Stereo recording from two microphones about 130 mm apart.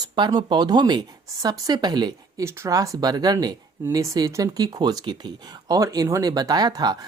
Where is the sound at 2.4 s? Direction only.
20° right (ahead or behind).